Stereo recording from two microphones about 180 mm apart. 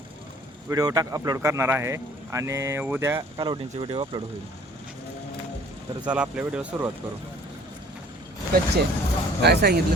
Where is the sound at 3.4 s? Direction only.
25° right (ahead or behind).